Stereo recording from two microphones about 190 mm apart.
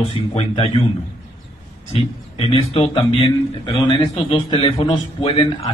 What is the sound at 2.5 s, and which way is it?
A man's voice, 30° left (ahead or behind).